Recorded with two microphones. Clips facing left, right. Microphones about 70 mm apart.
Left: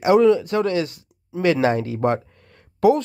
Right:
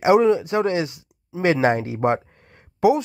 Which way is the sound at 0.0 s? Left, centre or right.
Right.